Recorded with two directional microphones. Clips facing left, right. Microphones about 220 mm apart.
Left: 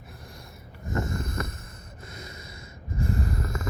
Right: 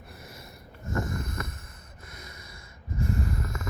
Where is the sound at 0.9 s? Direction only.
30° left (ahead or behind).